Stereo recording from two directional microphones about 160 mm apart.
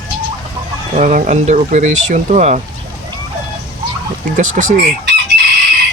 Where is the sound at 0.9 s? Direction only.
50° right (ahead or behind).